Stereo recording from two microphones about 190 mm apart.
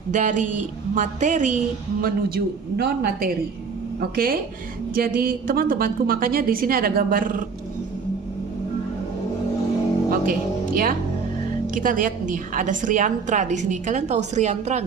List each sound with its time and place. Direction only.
0.1 s a woman's voice: 40° right (ahead or behind)
2.0 s a woman's voice: 50° right (ahead or behind)
10.1 s music: 50° right (ahead or behind)
11.7 s a woman's voice: 45° right (ahead or behind)